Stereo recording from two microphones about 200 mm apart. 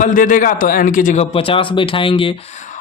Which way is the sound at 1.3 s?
25° left (ahead or behind).